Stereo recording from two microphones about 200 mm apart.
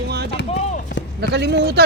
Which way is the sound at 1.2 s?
55° right (ahead or behind).